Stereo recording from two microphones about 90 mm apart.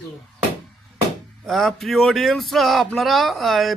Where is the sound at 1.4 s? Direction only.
Centre (ahead or behind).